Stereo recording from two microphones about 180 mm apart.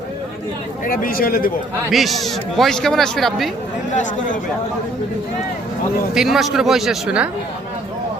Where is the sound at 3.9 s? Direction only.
45° left (ahead or behind).